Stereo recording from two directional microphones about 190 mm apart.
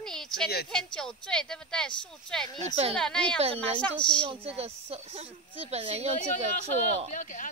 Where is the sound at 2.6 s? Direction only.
35° right (ahead or behind).